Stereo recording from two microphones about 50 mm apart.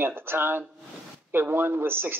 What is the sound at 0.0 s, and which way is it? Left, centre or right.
Speech, right.